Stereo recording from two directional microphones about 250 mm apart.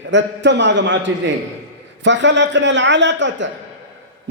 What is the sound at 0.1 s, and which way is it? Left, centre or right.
A man's voice, right.